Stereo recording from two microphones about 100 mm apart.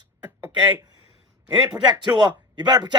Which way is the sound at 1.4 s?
45° right (ahead or behind).